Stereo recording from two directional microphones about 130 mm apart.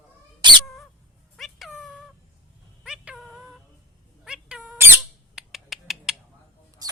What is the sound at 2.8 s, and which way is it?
Cat, 5° right (ahead or behind).